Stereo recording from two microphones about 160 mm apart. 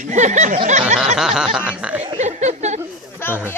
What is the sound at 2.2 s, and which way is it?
Speech, 45° right (ahead or behind).